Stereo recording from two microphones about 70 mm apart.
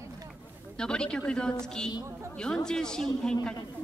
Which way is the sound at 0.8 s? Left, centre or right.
Centre.